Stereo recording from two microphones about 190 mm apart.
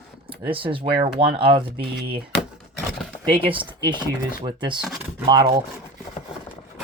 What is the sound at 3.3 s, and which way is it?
Speech, 25° right (ahead or behind).